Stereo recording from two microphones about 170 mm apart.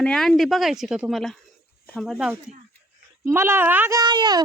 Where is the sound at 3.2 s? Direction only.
15° right (ahead or behind).